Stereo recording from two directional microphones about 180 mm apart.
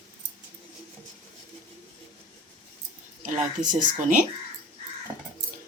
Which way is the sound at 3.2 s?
45° right (ahead or behind).